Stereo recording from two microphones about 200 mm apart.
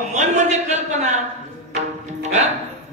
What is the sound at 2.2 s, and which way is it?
Speech, 35° right (ahead or behind).